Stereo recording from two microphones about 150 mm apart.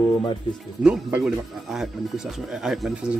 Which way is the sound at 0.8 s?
10° right (ahead or behind).